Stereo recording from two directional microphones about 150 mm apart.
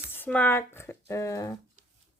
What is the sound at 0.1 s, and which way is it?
Speech, 10° left (ahead or behind).